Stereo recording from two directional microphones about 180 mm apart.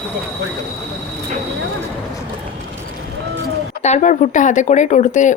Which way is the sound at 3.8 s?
40° left (ahead or behind).